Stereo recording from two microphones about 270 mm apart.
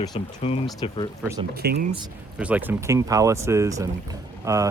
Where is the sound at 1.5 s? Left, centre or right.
Right.